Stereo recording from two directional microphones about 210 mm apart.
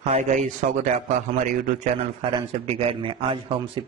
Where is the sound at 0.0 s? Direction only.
35° right (ahead or behind).